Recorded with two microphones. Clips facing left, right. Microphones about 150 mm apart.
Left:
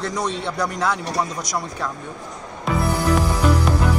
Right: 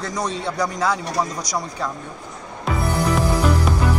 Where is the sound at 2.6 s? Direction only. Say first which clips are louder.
Left 1 dB; centre (ahead or behind).